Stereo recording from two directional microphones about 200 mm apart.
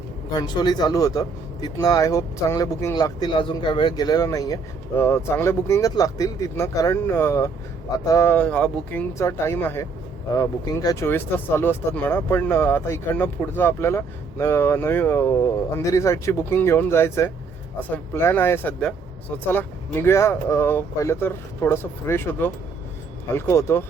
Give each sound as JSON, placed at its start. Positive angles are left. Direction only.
{"t": 0.3, "sound": "speech", "side_deg": 20}